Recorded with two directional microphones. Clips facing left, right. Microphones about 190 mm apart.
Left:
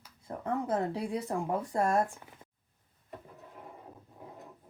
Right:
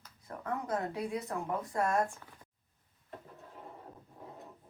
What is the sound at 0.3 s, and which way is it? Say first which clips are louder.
Speech: left 4 dB; 25° left (ahead or behind).